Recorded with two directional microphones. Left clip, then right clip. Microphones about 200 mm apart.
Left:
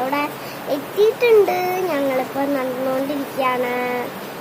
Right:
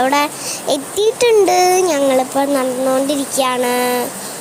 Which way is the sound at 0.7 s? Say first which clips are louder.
Right 2 dB; 40° right (ahead or behind).